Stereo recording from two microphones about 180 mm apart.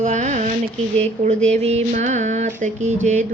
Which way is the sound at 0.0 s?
40° right (ahead or behind).